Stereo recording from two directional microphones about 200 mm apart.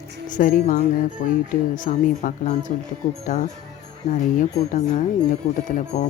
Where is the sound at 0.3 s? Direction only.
40° left (ahead or behind).